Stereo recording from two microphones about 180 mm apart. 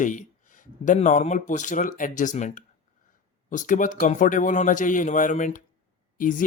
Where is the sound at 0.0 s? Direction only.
45° left (ahead or behind).